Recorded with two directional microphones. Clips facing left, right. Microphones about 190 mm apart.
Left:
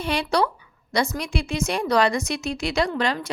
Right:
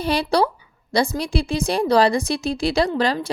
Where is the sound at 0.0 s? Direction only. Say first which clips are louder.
Right 3 dB; 35° right (ahead or behind).